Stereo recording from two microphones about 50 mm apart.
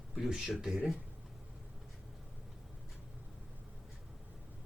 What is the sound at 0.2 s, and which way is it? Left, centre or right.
Speech, centre.